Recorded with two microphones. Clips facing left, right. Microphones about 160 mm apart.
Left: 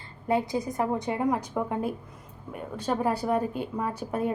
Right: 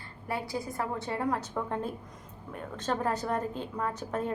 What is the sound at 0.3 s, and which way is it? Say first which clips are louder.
A woman's voice: left 8 dB; 20° left (ahead or behind).